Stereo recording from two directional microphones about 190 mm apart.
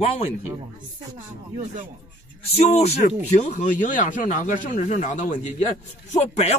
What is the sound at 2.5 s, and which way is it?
A man's voice, 35° left (ahead or behind).